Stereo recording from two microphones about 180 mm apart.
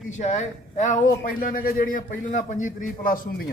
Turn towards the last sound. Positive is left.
turn(degrees=50)  # may be behind; listen again after turning